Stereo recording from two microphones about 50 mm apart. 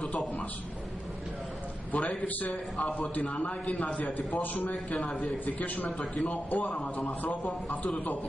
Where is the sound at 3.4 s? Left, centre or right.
Left.